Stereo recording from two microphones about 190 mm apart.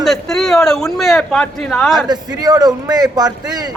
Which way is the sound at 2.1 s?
20° right (ahead or behind).